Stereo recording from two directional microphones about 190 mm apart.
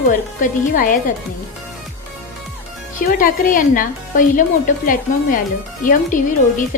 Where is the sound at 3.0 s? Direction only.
50° left (ahead or behind).